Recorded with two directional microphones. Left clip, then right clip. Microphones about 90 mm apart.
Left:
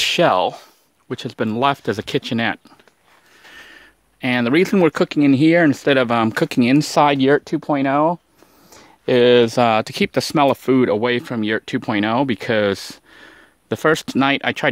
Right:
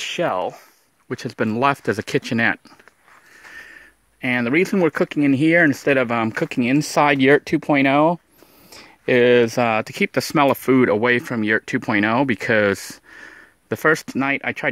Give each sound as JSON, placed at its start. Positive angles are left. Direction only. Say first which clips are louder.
{"t": 0.0, "sound": "speech", "louder": "left 7 dB", "side_deg": 90}
{"t": 1.0, "sound": "speech", "louder": "even", "side_deg": 10}
{"t": 4.2, "sound": "speech", "louder": "left 2 dB", "side_deg": 40}
{"t": 5.6, "sound": "speech", "louder": "left 1 dB", "side_deg": 35}
{"t": 7.4, "sound": "speech", "louder": "right 2 dB", "side_deg": -20}
{"t": 8.6, "sound": "a sound", "louder": "right 3 dB", "side_deg": 0}
{"t": 9.0, "sound": "speech", "louder": "left 2 dB", "side_deg": 20}
{"t": 10.6, "sound": "speech", "louder": "even", "side_deg": 5}
{"t": 13.7, "sound": "speech", "louder": "left 1 dB", "side_deg": 25}
{"t": 14.0, "sound": "speech", "louder": "left 4 dB", "side_deg": 50}